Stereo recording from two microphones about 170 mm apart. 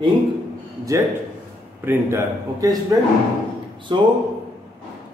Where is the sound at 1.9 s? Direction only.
15° right (ahead or behind).